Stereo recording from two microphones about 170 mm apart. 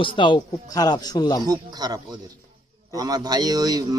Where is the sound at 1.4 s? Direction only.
25° right (ahead or behind).